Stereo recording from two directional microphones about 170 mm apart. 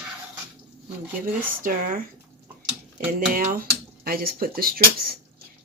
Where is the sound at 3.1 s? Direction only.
60° right (ahead or behind).